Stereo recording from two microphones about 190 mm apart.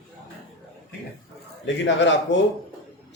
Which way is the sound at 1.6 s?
70° left (ahead or behind).